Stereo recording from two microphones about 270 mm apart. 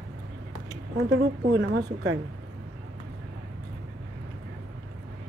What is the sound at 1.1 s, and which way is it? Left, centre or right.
A woman's voice, right.